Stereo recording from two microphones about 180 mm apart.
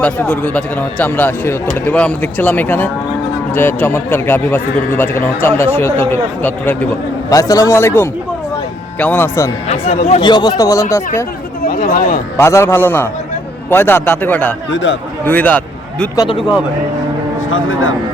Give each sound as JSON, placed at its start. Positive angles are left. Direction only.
{"t": 0.0, "sound": "a man's voice", "side_deg": 10}
{"t": 9.6, "sound": "speech", "side_deg": 35}
{"t": 10.2, "sound": "a man's voice", "side_deg": 25}
{"t": 11.6, "sound": "speech", "side_deg": 50}
{"t": 12.4, "sound": "a man's voice", "side_deg": 15}
{"t": 14.7, "sound": "speech", "side_deg": 90}
{"t": 15.2, "sound": "speech", "side_deg": 10}
{"t": 16.1, "sound": "a man's voice", "side_deg": 25}
{"t": 17.5, "sound": "speech", "side_deg": 90}